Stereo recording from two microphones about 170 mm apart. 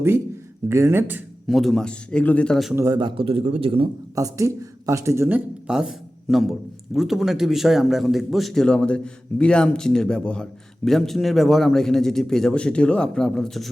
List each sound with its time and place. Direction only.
0.7 s speech: 15° right (ahead or behind)
1.5 s a man's voice: centre (ahead or behind)
2.7 s a man's voice: 20° right (ahead or behind)
4.1 s speech: 20° right (ahead or behind)
5.6 s a man's voice: 5° right (ahead or behind)